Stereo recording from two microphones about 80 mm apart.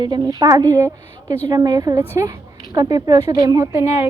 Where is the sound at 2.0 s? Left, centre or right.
Right.